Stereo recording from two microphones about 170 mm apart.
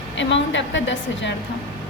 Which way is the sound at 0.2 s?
90° left.